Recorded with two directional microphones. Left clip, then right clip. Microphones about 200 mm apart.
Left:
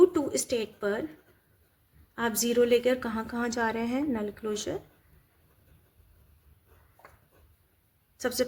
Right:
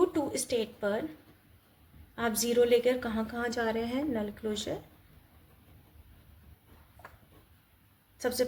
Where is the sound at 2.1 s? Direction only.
40° left (ahead or behind).